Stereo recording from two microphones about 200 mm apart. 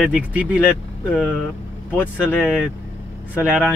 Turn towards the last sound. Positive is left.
turn(degrees=-5)  # may be behind; listen again after turning